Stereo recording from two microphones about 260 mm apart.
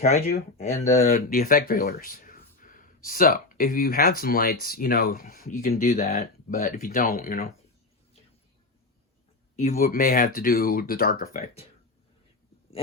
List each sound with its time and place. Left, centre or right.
0.0 s speech: left
9.6 s speech: left